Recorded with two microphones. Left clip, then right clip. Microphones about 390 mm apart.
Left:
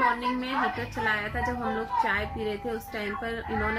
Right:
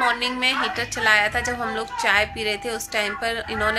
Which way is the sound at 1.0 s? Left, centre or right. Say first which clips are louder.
Right 8 dB; right.